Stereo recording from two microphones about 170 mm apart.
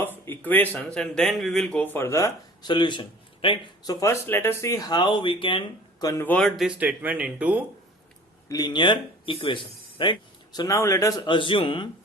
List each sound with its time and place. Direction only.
0.0 s speech: 10° left (ahead or behind); by 3.9 s 30° left (ahead or behind)
4.0 s speech: 15° left (ahead or behind); by 7.6 s 10° right (ahead or behind)
8.4 s speech: 20° left (ahead or behind)